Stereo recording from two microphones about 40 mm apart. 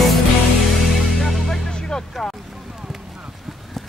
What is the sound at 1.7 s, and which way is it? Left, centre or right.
Music, centre.